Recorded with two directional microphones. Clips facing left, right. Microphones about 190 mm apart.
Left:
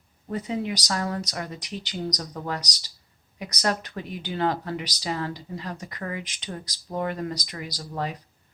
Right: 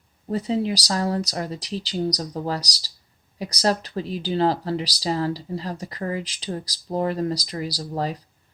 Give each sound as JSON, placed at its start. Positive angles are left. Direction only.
{"t": 0.3, "sound": "speech", "side_deg": -30}